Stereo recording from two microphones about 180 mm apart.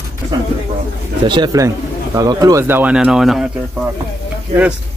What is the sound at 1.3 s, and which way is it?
Speech, 20° right (ahead or behind).